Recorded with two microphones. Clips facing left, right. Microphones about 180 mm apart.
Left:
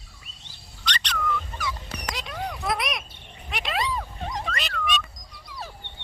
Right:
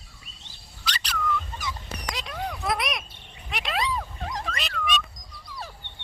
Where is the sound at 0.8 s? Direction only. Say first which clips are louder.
Left 1 dB; 5° right (ahead or behind).